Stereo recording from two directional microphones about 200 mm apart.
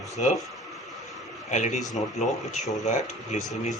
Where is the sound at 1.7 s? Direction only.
Centre (ahead or behind).